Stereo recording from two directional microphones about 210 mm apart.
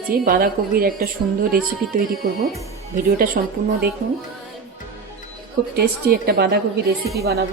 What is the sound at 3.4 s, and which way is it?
Speech, 45° right (ahead or behind).